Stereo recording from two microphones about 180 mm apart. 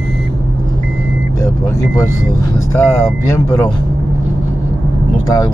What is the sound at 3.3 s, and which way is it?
Speech, 15° left (ahead or behind).